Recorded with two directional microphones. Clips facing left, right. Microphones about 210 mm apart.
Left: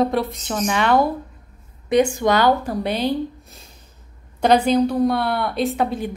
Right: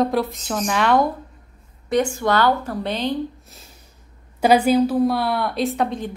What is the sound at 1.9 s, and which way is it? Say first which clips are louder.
Speech: left 3 dB; 15° left (ahead or behind).